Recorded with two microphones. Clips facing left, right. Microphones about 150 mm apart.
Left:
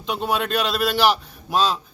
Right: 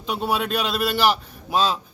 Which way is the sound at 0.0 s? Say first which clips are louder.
Even; 5° right (ahead or behind).